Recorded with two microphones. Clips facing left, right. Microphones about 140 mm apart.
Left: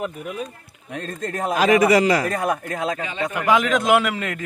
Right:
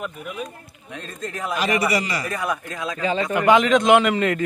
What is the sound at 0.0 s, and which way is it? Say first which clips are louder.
Speech: left 3 dB; 35° left (ahead or behind).